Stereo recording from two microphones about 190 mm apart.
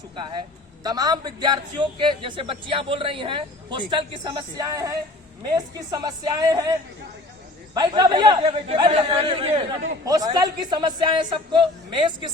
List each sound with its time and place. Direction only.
0.2 s a man's voice: 25° right (ahead or behind)